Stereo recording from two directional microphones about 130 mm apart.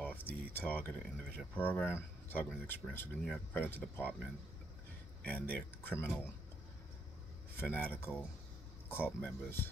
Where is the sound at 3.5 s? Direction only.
15° left (ahead or behind).